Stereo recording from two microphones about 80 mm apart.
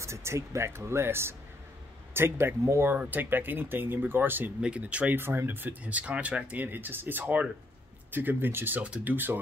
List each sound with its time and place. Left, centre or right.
0.0 s speech: right
4.6 s speech: centre
5.2 s speech: right